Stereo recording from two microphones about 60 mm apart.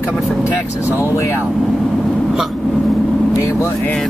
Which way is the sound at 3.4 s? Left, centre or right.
Left.